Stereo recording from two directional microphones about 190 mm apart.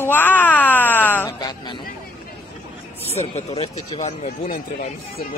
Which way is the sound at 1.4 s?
20° left (ahead or behind).